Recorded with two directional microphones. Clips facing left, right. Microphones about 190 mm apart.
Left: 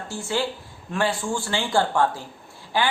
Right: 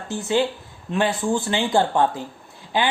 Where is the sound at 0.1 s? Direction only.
20° right (ahead or behind).